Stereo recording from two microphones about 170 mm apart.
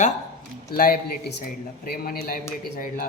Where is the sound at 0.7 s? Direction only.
60° left (ahead or behind).